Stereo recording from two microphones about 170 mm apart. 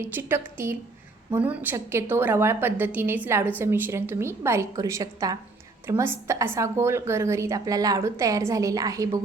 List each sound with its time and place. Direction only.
0.0 s a woman's voice: 15° right (ahead or behind)